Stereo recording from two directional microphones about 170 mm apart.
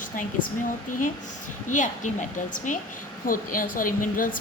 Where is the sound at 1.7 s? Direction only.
45° left (ahead or behind).